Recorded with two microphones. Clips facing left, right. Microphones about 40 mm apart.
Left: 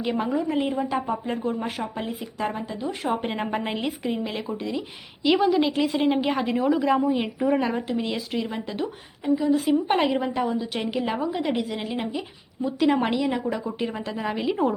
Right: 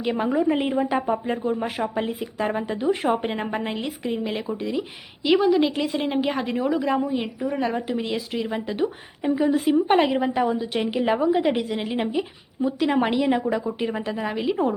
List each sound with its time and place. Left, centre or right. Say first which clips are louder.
0.0 s a woman's voice: right 1 dB; centre
0.4 s speech: right 3 dB; right
1.3 s a woman's voice: right 2 dB; centre
2.5 s speech: right 6 dB; right
3.2 s a woman's voice: right 1 dB; centre
9.2 s speech: right 1 dB; right
9.6 s a woman's voice: right 3 dB; centre